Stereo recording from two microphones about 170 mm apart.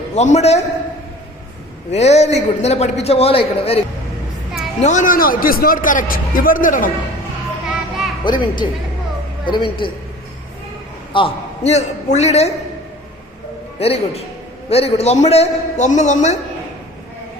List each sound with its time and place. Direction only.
0.2 s a man's voice: 40° left (ahead or behind)
1.9 s a man's voice: 40° left (ahead or behind)
4.8 s a man's voice: 45° left (ahead or behind)
7.7 s children playing: centre (ahead or behind)
8.2 s a woman's voice: 25° left (ahead or behind)
11.1 s a man's voice: 35° left (ahead or behind)
13.7 s a man's voice: 35° left (ahead or behind)